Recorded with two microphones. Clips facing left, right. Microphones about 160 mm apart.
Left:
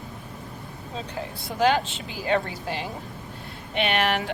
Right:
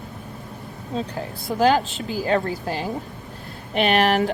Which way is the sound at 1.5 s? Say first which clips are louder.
Right 4 dB; 40° right (ahead or behind).